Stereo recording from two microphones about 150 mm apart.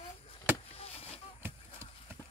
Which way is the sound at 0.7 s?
40° left (ahead or behind).